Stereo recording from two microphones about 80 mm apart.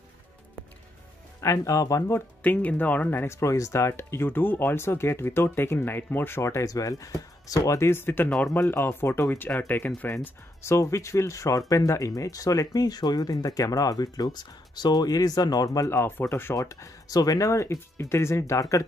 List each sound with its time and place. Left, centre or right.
1.4 s speech: left
2.1 s speech: left
10.6 s speech: left
16.1 s speech: left
16.5 s speech: left